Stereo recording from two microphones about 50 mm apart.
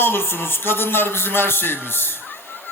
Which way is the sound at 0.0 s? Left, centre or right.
Left.